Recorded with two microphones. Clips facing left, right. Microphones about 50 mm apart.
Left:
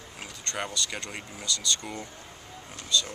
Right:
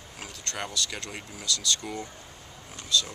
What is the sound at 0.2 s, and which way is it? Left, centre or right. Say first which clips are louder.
Speech: left 1 dB; centre.